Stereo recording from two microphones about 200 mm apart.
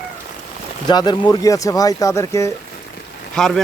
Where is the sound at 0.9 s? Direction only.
20° left (ahead or behind).